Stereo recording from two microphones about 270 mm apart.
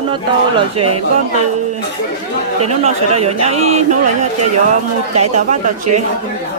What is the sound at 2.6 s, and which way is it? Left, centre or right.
A man's voice, right.